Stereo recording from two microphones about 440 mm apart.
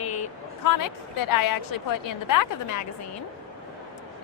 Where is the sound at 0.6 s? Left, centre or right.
Left.